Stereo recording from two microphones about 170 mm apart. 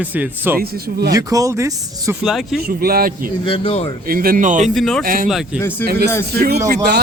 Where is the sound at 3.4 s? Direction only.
30° left (ahead or behind).